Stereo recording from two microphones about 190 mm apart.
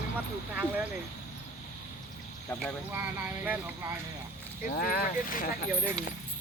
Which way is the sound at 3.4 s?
10° right (ahead or behind).